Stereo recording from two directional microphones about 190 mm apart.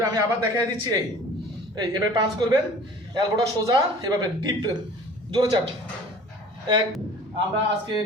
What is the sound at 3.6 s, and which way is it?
A man's voice, 20° right (ahead or behind).